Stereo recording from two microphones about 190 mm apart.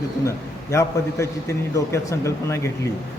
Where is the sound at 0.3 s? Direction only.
15° left (ahead or behind).